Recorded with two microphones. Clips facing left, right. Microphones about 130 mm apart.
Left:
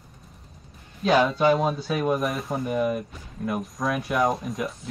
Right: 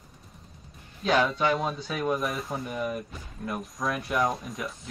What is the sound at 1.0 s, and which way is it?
Speech, 5° left (ahead or behind).